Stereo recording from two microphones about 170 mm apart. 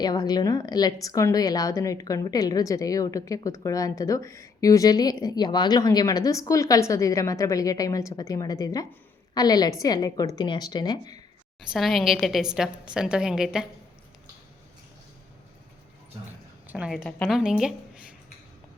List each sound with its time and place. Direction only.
0.0 s a woman's voice: 25° left (ahead or behind)
11.7 s a woman's voice: centre (ahead or behind)
16.6 s a woman's voice: 5° right (ahead or behind)
17.0 s a woman's voice: 5° left (ahead or behind)